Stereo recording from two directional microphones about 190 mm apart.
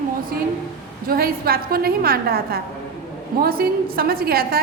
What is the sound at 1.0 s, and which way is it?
A woman's voice, 50° right (ahead or behind).